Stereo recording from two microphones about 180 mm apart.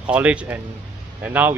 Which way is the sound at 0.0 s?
5° right (ahead or behind).